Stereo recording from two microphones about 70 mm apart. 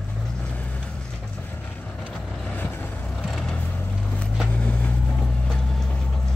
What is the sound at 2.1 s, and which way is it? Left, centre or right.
Vehicle, left.